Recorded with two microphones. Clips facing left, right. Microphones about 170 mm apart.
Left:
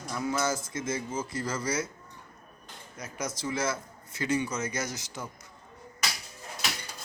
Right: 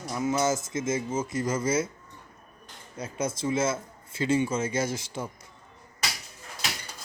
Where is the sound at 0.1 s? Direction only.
20° right (ahead or behind).